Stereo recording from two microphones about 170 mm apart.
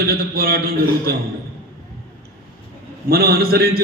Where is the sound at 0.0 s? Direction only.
60° right (ahead or behind).